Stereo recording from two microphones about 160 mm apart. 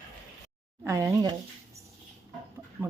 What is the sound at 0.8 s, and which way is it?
Speech, 20° right (ahead or behind).